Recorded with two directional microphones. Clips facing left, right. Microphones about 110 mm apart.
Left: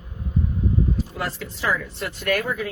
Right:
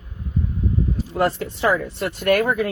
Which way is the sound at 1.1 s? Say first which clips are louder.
Right 9 dB; 50° right (ahead or behind).